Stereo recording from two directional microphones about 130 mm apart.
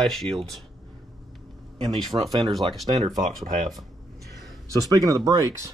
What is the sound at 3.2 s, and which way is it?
Speech, 90° right.